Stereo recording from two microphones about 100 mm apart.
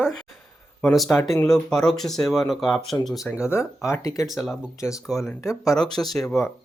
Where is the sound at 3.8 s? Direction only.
30° left (ahead or behind).